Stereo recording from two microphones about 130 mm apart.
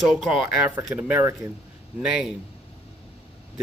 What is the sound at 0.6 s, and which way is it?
Speech, 15° right (ahead or behind).